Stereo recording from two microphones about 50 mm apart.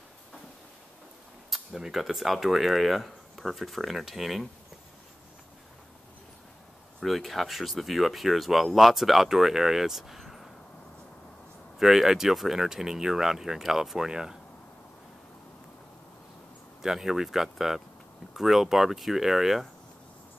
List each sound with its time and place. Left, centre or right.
1.5 s speech: centre
7.0 s speech: centre
11.8 s speech: centre
16.8 s speech: centre